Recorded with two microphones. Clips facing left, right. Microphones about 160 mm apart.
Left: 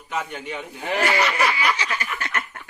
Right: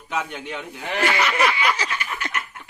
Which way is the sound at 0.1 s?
Centre (ahead or behind).